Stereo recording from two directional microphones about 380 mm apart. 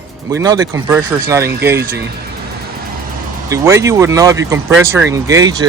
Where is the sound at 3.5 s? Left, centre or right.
Centre.